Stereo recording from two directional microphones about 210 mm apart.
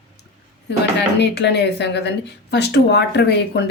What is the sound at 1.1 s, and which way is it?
Speech, 55° left (ahead or behind).